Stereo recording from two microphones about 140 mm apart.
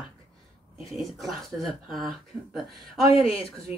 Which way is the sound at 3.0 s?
45° left (ahead or behind).